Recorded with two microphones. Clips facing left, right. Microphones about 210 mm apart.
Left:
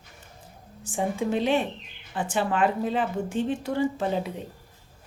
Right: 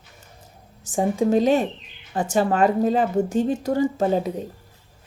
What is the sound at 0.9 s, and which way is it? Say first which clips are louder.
A woman's voice: right 6 dB; 40° right (ahead or behind).